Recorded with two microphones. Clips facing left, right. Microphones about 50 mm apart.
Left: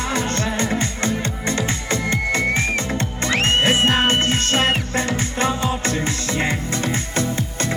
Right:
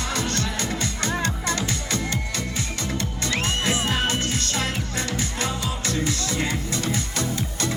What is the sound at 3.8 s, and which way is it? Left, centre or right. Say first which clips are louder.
Music: left 7 dB; left.